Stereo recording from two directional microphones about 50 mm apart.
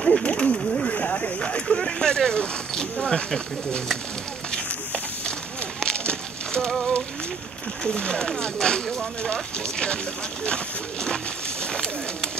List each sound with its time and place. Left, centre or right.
0.0 s speech: centre
5.8 s a sound: centre
7.8 s speech: centre
11.6 s bird: centre